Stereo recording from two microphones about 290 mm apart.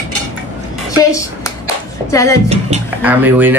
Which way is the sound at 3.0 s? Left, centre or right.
Centre.